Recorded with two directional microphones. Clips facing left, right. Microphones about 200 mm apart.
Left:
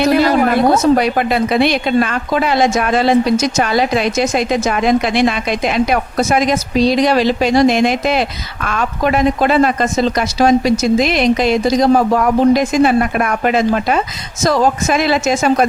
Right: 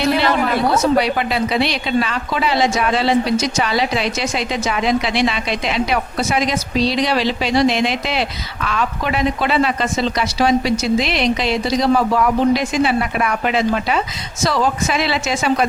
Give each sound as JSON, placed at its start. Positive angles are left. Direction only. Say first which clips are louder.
{"t": 0.0, "sound": "a woman's voice", "louder": "left 5 dB", "side_deg": 45}